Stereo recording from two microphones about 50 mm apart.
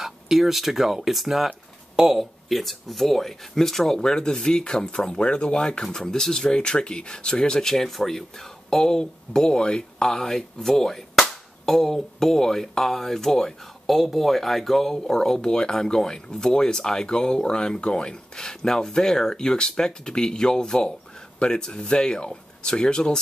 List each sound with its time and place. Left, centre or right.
0.0 s speech: centre